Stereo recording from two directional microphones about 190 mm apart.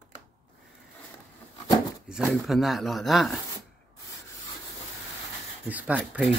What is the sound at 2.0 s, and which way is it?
Speech, 5° right (ahead or behind).